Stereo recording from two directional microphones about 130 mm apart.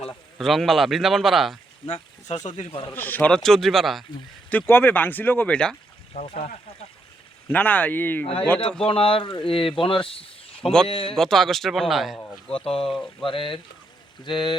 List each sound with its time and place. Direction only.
0.3 s a man's voice: centre (ahead or behind)
1.9 s speech: 60° left (ahead or behind)
2.9 s a man's voice: 15° left (ahead or behind)
4.4 s speech: 15° left (ahead or behind)
6.2 s speech: 50° left (ahead or behind)
7.5 s speech: 10° left (ahead or behind)
8.9 s speech: 45° left (ahead or behind)
11.1 s a man's voice: 5° left (ahead or behind)
12.5 s speech: 45° left (ahead or behind)
12.9 s a man's voice: 5° left (ahead or behind)
13.2 s speech: 40° left (ahead or behind)